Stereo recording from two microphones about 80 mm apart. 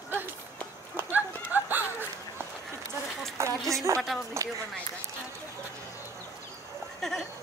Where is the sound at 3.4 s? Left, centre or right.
Right.